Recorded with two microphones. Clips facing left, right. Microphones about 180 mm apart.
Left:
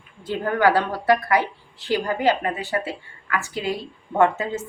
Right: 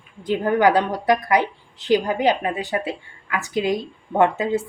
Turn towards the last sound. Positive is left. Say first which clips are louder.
# right 1 dB
turn(degrees=-15)  # may be behind; listen again after turning